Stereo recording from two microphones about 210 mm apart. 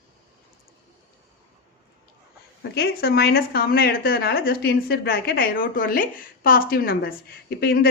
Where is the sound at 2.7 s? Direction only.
50° left (ahead or behind).